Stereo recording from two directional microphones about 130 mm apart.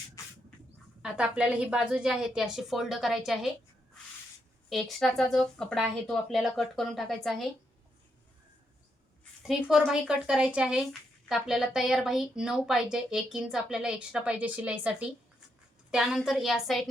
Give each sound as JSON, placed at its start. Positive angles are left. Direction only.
{"t": 0.2, "sound": "spray", "side_deg": 25}
{"t": 1.0, "sound": "a woman's voice", "side_deg": -5}
{"t": 4.7, "sound": "a woman's voice", "side_deg": 0}
{"t": 9.5, "sound": "a woman's voice", "side_deg": -5}